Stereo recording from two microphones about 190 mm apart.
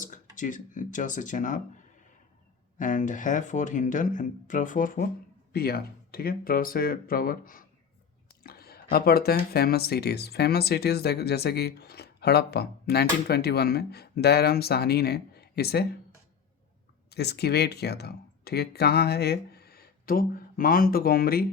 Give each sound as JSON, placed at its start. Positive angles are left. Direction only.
{"t": 0.0, "sound": "speech", "side_deg": 40}
{"t": 2.7, "sound": "speech", "side_deg": 40}
{"t": 17.1, "sound": "speech", "side_deg": 60}